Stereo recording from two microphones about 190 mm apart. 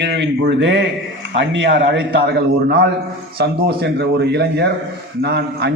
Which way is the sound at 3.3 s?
55° right (ahead or behind).